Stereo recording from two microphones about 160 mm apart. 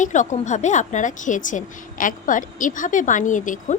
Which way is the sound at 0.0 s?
50° left (ahead or behind).